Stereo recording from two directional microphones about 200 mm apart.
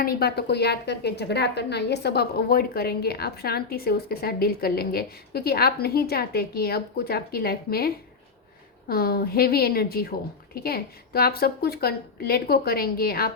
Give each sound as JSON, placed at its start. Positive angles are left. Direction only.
{"t": 0.0, "sound": "a woman's voice", "side_deg": 50}